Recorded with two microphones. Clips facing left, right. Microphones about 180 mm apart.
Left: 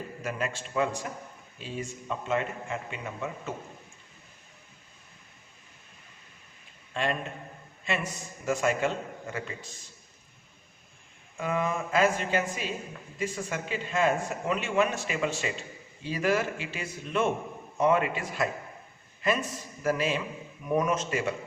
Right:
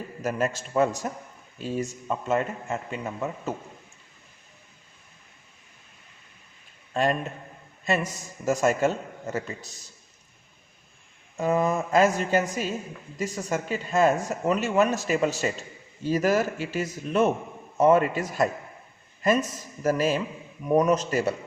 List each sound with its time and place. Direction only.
0.2 s a man's voice: 40° right (ahead or behind)
6.9 s a man's voice: 40° right (ahead or behind)
11.3 s speech: 40° right (ahead or behind)